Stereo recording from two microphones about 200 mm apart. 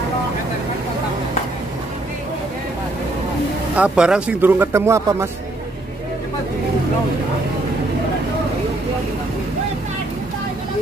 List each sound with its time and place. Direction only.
3.7 s speech: 5° right (ahead or behind)